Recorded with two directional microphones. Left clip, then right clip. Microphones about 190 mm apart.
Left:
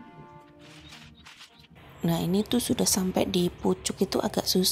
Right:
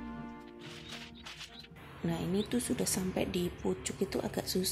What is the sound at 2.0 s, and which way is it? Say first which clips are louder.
A woman's voice: left 7 dB; 25° left (ahead or behind).